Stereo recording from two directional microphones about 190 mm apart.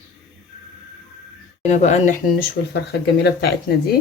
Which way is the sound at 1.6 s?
35° left (ahead or behind).